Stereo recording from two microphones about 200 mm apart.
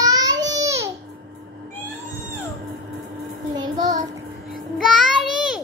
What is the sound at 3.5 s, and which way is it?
Child singing, 20° right (ahead or behind).